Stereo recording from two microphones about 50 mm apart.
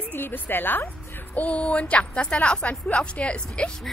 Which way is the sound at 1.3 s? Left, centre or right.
Left.